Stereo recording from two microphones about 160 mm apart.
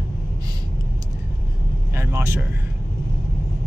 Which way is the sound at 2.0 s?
15° right (ahead or behind).